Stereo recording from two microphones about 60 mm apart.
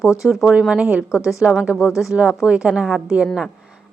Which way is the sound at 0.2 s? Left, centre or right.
Centre.